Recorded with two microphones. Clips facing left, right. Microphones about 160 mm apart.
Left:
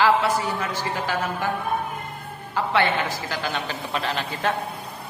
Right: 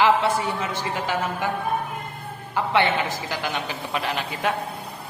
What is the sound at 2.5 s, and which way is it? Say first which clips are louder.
A woman's voice: right 1 dB; 20° right (ahead or behind).